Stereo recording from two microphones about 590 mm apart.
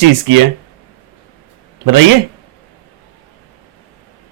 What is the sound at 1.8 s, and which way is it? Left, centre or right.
Speech, right.